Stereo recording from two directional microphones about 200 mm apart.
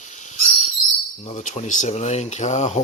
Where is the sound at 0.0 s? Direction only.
40° left (ahead or behind).